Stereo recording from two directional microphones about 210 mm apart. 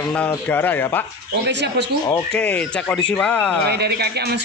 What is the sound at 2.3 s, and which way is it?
A man's voice, 5° left (ahead or behind).